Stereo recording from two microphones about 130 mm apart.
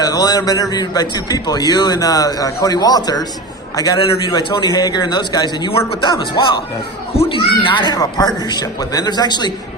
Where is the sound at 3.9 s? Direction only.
45° left (ahead or behind).